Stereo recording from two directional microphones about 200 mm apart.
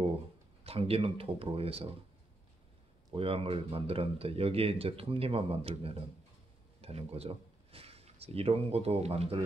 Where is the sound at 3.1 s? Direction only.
30° right (ahead or behind).